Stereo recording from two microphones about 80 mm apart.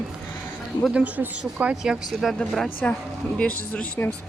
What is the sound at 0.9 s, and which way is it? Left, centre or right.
Speech, centre.